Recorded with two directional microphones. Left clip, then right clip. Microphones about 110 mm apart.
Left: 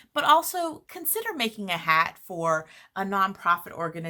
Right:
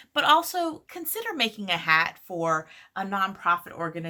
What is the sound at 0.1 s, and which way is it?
A woman's voice, 20° left (ahead or behind).